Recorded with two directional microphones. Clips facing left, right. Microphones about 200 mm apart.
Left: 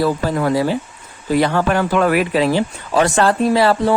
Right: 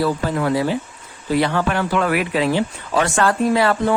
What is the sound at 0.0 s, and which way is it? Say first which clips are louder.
Speech: left 2 dB; 40° left (ahead or behind).